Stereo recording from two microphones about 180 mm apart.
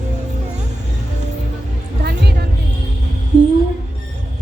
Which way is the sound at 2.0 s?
65° right (ahead or behind).